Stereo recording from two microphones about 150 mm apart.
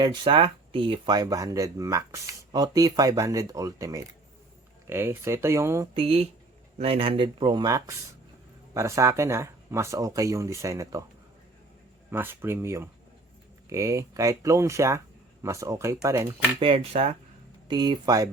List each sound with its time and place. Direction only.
0.0 s speech: 30° right (ahead or behind)
5.9 s speech: 40° right (ahead or behind); by 11.0 s 20° right (ahead or behind)
12.1 s speech: 15° right (ahead or behind)
16.6 s speech: 35° right (ahead or behind)
17.7 s speech: 30° right (ahead or behind)